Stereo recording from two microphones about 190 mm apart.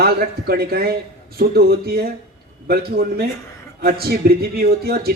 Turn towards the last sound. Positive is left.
turn(degrees=-55)  # may be behind; listen again after turning